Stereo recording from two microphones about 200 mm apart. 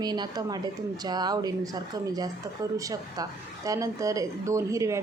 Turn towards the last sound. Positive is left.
turn(degrees=-15)  # may be behind; listen again after turning